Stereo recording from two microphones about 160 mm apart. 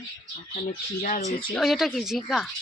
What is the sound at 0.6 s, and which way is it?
Speech, 55° left (ahead or behind).